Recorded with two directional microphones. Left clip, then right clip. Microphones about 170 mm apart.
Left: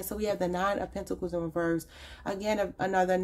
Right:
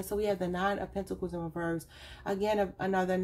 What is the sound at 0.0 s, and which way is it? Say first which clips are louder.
Speech: left 1 dB; 40° left (ahead or behind).